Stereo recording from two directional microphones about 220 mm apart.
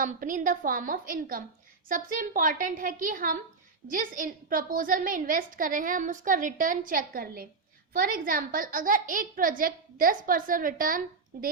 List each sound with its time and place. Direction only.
0.0 s a woman's voice: 40° right (ahead or behind)